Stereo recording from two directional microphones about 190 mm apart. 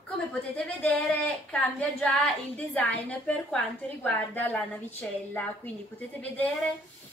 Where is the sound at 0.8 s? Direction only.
5° left (ahead or behind).